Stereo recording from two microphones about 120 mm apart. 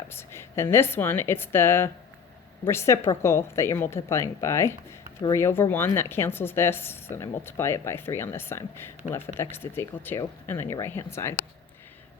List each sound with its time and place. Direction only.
0.1 s a woman's voice: 20° left (ahead or behind)